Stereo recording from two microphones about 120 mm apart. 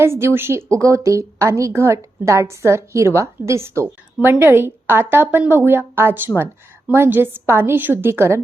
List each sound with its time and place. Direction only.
0.0 s a woman's voice: 20° right (ahead or behind)